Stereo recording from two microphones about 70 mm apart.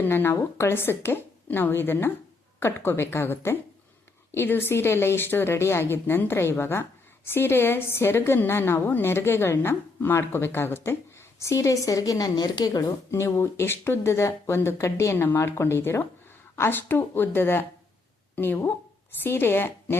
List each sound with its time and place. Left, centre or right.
0.0 s a woman's voice: left
13.1 s a woman's voice: left
15.1 s a woman's voice: left